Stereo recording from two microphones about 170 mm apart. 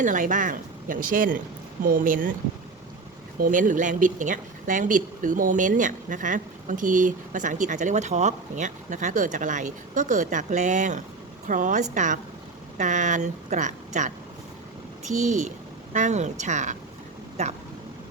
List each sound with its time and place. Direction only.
0.0 s speech: 50° right (ahead or behind)
3.3 s a woman's voice: 50° right (ahead or behind)
15.1 s speech: 45° right (ahead or behind)